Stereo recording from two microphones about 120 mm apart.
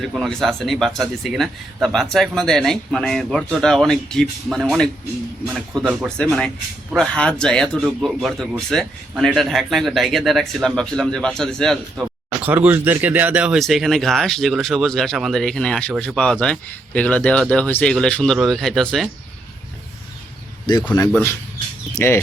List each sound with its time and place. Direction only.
0.1 s speech: centre (ahead or behind)
5.8 s speech: 10° right (ahead or behind)
6.1 s speech: 5° left (ahead or behind)
12.4 s speech: 15° right (ahead or behind); by 19.0 s centre (ahead or behind)
20.9 s speech: 35° left (ahead or behind)
21.9 s speech: 20° left (ahead or behind)